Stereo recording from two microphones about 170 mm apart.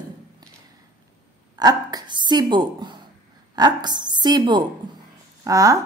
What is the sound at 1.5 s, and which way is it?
A woman's voice, 25° right (ahead or behind).